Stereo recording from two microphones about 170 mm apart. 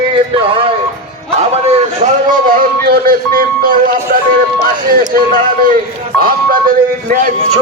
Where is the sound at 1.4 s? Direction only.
40° right (ahead or behind).